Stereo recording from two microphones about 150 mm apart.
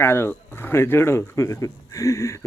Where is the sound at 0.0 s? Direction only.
15° left (ahead or behind).